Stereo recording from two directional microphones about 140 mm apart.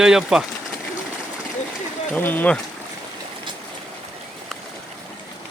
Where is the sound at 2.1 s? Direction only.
15° left (ahead or behind).